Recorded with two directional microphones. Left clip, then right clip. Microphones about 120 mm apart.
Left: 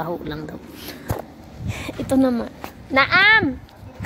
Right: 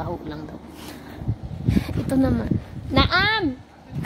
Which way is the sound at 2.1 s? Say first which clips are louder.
Left 3 dB; centre (ahead or behind).